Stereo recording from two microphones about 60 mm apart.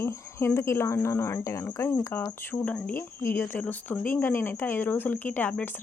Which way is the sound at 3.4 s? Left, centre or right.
Left.